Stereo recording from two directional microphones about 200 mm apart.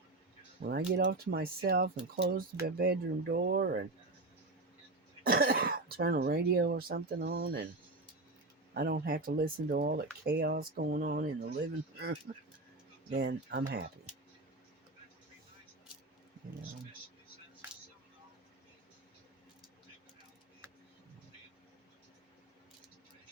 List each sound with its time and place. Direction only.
0.6 s speech: 35° right (ahead or behind)
0.9 s speech: 50° right (ahead or behind)
5.2 s speech: 45° right (ahead or behind)
8.7 s speech: 50° right (ahead or behind)